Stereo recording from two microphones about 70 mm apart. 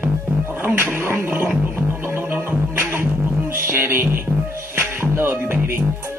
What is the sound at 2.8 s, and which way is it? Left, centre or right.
Beatboxing, right.